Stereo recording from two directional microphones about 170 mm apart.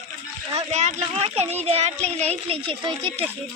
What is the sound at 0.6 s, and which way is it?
Speech, 40° right (ahead or behind).